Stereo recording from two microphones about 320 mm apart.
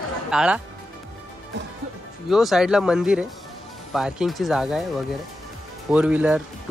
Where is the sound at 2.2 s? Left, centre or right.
Centre.